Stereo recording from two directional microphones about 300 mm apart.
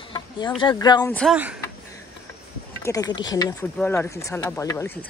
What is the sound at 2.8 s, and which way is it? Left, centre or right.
Speech, centre.